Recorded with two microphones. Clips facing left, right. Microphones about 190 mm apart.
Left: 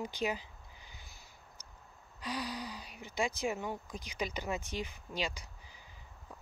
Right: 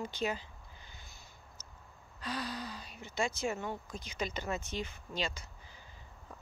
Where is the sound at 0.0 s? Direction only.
15° left (ahead or behind).